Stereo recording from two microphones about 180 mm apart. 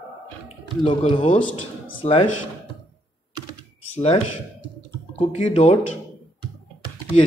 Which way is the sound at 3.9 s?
35° left (ahead or behind).